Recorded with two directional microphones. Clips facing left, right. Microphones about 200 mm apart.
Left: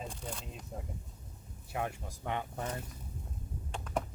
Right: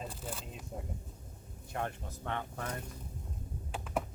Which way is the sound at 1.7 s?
10° left (ahead or behind).